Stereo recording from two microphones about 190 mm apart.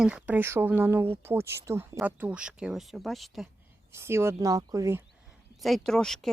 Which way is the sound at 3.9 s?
15° right (ahead or behind).